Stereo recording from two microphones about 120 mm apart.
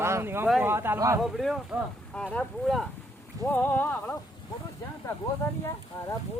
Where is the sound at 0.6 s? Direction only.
20° right (ahead or behind).